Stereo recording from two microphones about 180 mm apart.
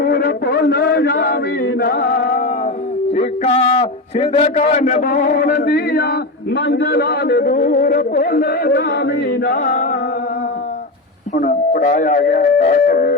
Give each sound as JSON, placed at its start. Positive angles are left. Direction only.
{"t": 0.0, "sound": "chant", "side_deg": 55}
{"t": 3.1, "sound": "a man's voice", "side_deg": 35}
{"t": 11.3, "sound": "a man's voice", "side_deg": 45}